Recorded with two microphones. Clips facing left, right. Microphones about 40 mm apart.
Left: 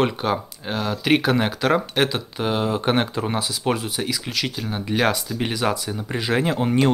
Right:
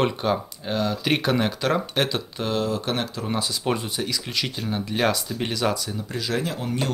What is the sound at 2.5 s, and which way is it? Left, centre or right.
Speech, left.